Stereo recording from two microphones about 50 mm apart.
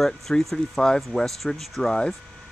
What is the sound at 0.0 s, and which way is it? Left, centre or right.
Speech, centre.